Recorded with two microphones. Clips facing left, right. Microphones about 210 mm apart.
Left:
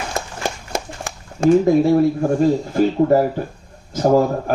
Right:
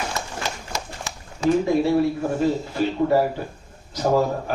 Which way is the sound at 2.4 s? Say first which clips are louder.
Left 6 dB; 45° left (ahead or behind).